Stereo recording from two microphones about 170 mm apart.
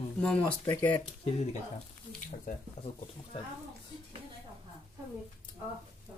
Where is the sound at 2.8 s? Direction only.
35° left (ahead or behind).